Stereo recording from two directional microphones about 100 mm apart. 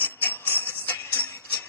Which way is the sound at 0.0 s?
20° left (ahead or behind).